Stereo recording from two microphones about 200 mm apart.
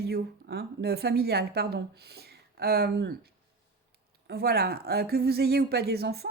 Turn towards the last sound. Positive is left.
turn(degrees=-55)  # may be behind; listen again after turning